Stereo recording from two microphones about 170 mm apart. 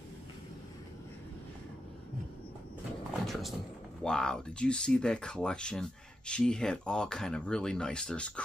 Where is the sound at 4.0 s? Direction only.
5° left (ahead or behind).